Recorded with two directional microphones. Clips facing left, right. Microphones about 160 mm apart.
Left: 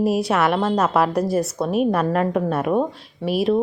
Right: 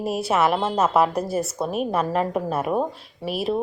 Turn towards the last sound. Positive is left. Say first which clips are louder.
# left 5 dB
turn(degrees=0)  # may be behind; listen again after turning